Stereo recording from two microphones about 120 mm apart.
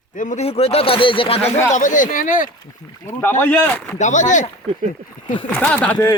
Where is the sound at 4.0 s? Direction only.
90° left.